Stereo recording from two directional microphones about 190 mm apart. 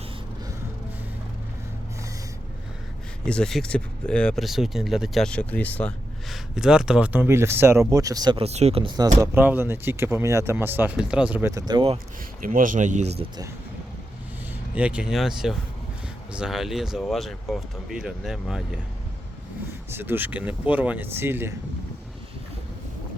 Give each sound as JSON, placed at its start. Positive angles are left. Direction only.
{"t": 3.2, "sound": "speech", "side_deg": 5}
{"t": 6.3, "sound": "speech", "side_deg": -5}
{"t": 12.4, "sound": "speech", "side_deg": -45}
{"t": 14.8, "sound": "speech", "side_deg": -5}
{"t": 19.9, "sound": "speech", "side_deg": -10}